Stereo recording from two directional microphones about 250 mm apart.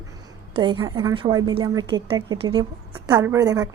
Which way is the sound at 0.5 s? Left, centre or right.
Centre.